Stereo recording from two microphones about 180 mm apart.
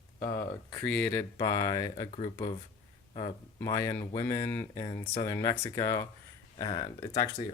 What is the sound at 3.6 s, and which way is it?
Speech, 15° left (ahead or behind).